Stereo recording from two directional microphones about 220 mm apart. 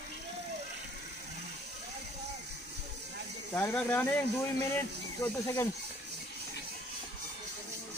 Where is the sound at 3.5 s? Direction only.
10° left (ahead or behind).